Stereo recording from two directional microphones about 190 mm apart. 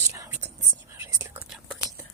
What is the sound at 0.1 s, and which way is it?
Whispering, 15° right (ahead or behind).